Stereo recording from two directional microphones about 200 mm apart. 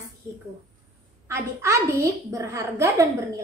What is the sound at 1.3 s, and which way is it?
A woman's voice, 15° right (ahead or behind).